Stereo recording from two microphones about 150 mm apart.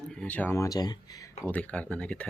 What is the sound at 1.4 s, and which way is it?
Speech, 10° left (ahead or behind).